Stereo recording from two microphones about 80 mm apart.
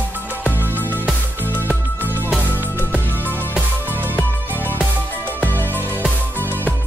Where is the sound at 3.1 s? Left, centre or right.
Left.